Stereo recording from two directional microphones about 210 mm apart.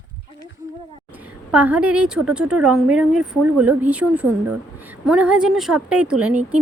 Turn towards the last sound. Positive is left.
turn(degrees=-5)  # may be behind; listen again after turning